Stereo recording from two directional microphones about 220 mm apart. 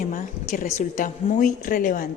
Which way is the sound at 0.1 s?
40° left (ahead or behind).